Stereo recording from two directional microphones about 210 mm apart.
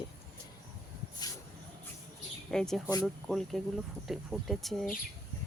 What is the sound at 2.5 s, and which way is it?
Speech, 5° left (ahead or behind).